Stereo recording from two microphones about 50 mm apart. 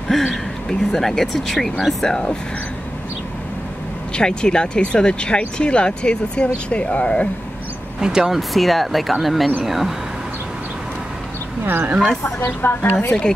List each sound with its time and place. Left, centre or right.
0.1 s speech: centre
4.1 s speech: centre
8.0 s speech: centre
8.4 s speech: centre
11.6 s speech: right
12.6 s a woman's voice: left